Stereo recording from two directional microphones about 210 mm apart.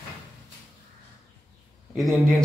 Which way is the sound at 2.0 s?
Centre (ahead or behind).